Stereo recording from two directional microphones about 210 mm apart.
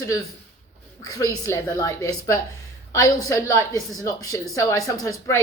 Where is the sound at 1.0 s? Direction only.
15° left (ahead or behind).